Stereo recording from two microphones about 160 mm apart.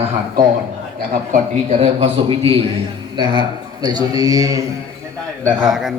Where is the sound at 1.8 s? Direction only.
35° right (ahead or behind).